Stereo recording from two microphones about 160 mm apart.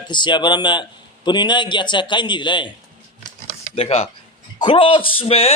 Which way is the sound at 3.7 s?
40° left (ahead or behind).